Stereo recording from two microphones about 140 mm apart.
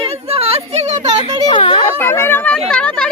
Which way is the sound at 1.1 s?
30° right (ahead or behind).